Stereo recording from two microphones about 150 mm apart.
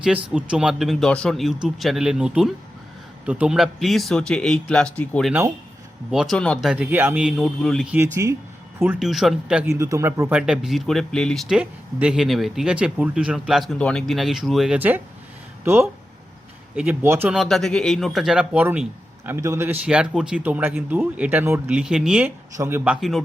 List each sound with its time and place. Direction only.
0.0 s speech: 5° right (ahead or behind)
6.9 s speech: 10° right (ahead or behind)
7.9 s speech: 15° right (ahead or behind)
9.0 s speech: centre (ahead or behind)
9.6 s speech: 20° right (ahead or behind); by 14.8 s centre (ahead or behind)
14.8 s speech: 10° right (ahead or behind)
17.3 s speech: centre (ahead or behind)
22.5 s speech: 20° right (ahead or behind)
22.8 s speech: 5° right (ahead or behind)